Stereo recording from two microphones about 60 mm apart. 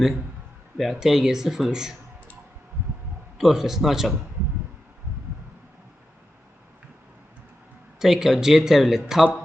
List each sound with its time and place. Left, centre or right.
0.8 s speech: centre
3.3 s speech: centre
7.9 s speech: centre